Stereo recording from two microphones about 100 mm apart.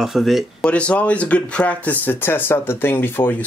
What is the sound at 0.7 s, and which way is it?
Speech, 10° left (ahead or behind).